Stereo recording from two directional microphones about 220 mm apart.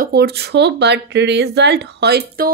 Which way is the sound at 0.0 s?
45° right (ahead or behind).